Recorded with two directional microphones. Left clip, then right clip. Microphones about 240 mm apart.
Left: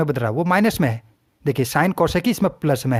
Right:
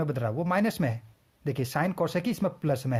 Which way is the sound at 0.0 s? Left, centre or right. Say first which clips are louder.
Left 9 dB; left.